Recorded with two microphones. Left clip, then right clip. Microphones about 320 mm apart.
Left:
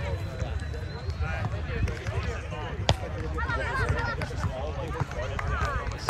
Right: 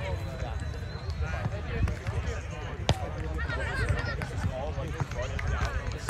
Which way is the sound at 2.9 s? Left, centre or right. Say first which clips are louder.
Left 3 dB; left.